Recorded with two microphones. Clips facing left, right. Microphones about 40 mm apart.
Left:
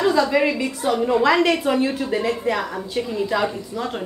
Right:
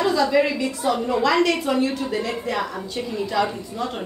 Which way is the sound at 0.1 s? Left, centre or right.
Centre.